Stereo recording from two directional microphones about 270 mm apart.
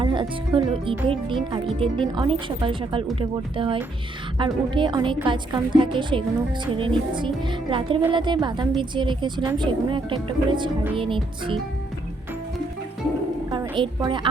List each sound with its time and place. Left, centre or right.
0.0 s speech: centre
13.5 s a woman's voice: centre